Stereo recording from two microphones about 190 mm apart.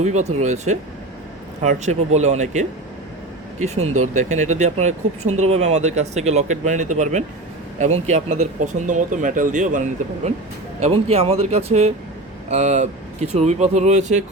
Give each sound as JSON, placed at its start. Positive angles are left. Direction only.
{"t": 0.0, "sound": "speech", "side_deg": -35}
{"t": 3.8, "sound": "speech", "side_deg": -35}